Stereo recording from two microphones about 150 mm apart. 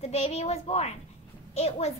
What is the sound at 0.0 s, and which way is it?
A child's voice, 45° left (ahead or behind).